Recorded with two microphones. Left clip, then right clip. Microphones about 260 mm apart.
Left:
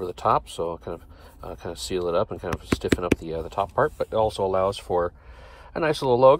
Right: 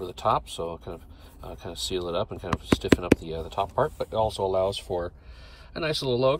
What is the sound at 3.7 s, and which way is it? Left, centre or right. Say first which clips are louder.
Speech: left 4 dB; left.